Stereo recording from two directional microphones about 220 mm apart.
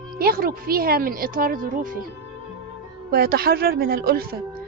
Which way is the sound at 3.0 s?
45° right (ahead or behind).